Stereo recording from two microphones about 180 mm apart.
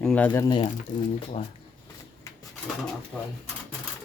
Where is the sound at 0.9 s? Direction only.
45° left (ahead or behind).